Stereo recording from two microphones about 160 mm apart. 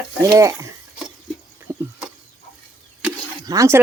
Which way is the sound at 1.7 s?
20° right (ahead or behind).